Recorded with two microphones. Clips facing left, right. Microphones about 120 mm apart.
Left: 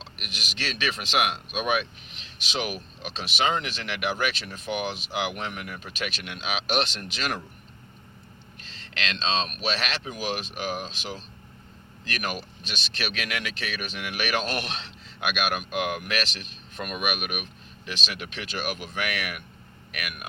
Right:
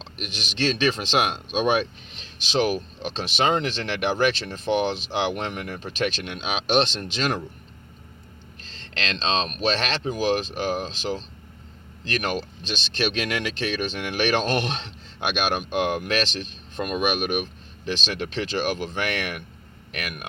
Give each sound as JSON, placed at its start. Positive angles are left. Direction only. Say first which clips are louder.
{"t": 0.0, "sound": "speech", "louder": "right 5 dB", "side_deg": -30}
{"t": 9.2, "sound": "speech", "louder": "right 3 dB", "side_deg": -25}
{"t": 9.6, "sound": "speech", "louder": "right 5 dB", "side_deg": -35}
{"t": 12.7, "sound": "speech", "louder": "right 7 dB", "side_deg": -25}